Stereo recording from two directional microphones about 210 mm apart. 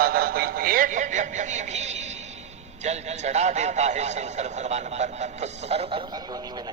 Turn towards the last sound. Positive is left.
turn(degrees=-30)  # may be behind; listen again after turning